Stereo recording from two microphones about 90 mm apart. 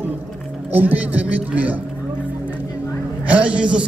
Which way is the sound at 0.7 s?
20° right (ahead or behind).